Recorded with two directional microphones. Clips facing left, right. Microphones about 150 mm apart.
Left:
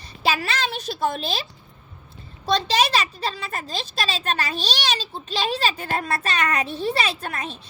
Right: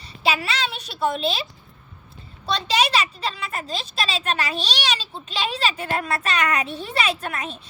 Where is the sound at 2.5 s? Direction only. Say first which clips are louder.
Left 1 dB; 40° left (ahead or behind).